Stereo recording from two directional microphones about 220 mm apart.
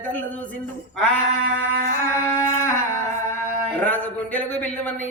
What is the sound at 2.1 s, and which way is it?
Speech, 10° left (ahead or behind).